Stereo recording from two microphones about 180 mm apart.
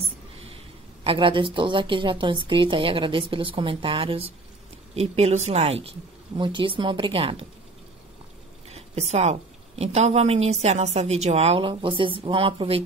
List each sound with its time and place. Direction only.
1.0 s a woman's voice: 30° right (ahead or behind)
8.6 s a woman's voice: 35° right (ahead or behind)